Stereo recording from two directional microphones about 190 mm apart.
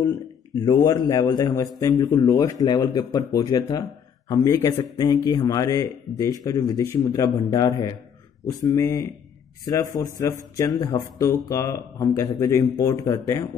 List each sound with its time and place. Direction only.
0.6 s a man's voice: 20° left (ahead or behind)